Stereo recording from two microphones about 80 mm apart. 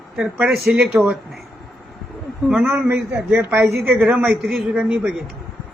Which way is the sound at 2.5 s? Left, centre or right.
Centre.